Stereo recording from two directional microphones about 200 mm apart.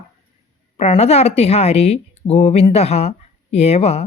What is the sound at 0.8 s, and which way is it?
Speech, 30° left (ahead or behind).